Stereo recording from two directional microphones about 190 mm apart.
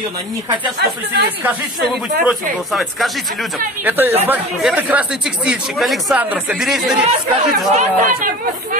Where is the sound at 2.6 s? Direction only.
Centre (ahead or behind).